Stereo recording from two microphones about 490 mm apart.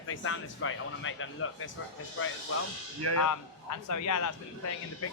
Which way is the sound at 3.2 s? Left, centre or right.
Left.